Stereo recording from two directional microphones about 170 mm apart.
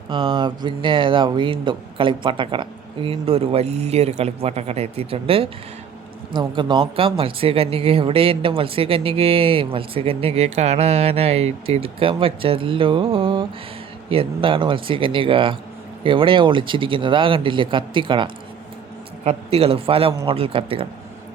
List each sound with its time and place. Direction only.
0.1 s speech: 30° right (ahead or behind)